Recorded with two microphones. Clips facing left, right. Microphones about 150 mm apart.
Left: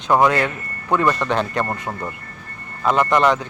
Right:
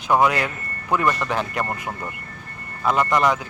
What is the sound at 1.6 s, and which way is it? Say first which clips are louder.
Speech: left 2 dB; 25° left (ahead or behind).